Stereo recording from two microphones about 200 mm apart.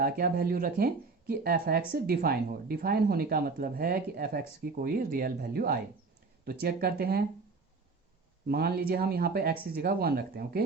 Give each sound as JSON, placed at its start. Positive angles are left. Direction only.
{"t": 0.0, "sound": "speech", "side_deg": -50}
{"t": 8.4, "sound": "speech", "side_deg": -50}